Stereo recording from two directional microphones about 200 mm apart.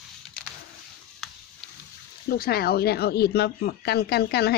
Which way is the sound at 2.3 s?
50° left (ahead or behind).